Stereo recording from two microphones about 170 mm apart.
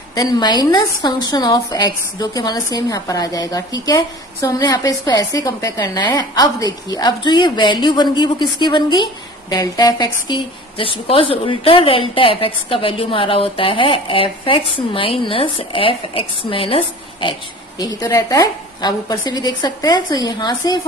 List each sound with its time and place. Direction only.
0.1 s a woman's voice: 25° left (ahead or behind)